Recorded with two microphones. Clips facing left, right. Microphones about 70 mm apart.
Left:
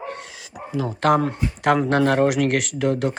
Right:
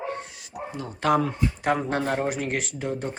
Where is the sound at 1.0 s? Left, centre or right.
Left.